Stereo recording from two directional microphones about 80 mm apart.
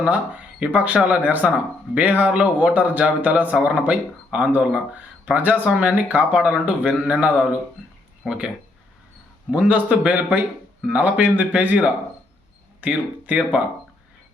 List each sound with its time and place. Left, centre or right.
0.0 s speech: centre
9.5 s speech: centre